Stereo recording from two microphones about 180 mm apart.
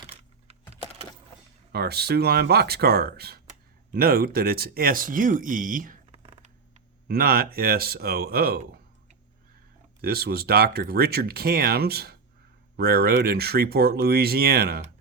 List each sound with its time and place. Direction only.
1.7 s speech: 65° right (ahead or behind); by 6.5 s 35° right (ahead or behind)
7.1 s speech: 55° right (ahead or behind)
10.0 s speech: 60° right (ahead or behind)